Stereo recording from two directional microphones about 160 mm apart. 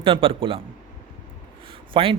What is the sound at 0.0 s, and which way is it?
Speech, 35° right (ahead or behind).